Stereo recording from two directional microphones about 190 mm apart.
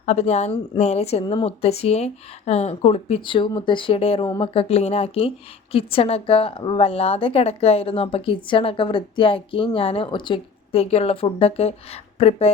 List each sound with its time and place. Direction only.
0.0 s a woman's voice: 35° left (ahead or behind)